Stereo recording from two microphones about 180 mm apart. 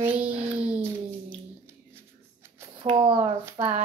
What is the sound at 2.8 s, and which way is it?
Speech, 30° right (ahead or behind).